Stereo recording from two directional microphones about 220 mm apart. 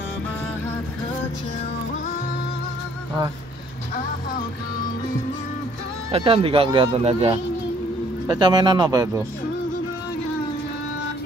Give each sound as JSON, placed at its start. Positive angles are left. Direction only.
{"t": 6.1, "sound": "speech", "side_deg": -25}